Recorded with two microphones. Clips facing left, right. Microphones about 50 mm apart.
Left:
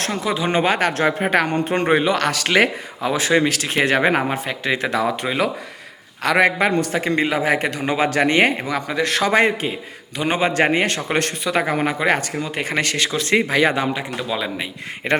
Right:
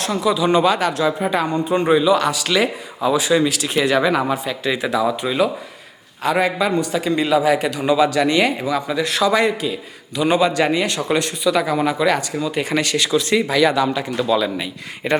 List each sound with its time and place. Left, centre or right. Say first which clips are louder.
0.0 s a man's voice: right 3 dB; left
15.0 s a man's voice: right 1 dB; left